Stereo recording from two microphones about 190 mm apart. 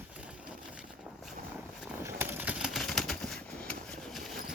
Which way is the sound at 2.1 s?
10° right (ahead or behind).